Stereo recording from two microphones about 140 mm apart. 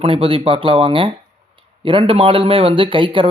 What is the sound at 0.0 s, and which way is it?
A man's voice, 40° right (ahead or behind).